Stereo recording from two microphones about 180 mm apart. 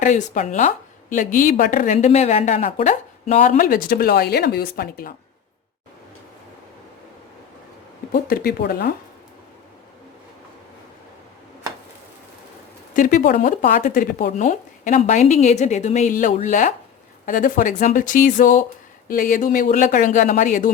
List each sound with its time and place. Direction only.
0.0 s a woman's voice: 40° left (ahead or behind)
8.1 s speech: 55° left (ahead or behind)
12.9 s a woman's voice: 50° left (ahead or behind)